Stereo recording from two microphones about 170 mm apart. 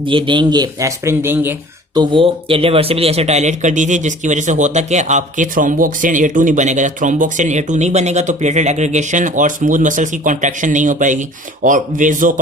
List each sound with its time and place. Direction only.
0.0 s speech: 30° right (ahead or behind); by 1.5 s 10° right (ahead or behind)
2.0 s speech: 30° right (ahead or behind); by 12.3 s 50° right (ahead or behind)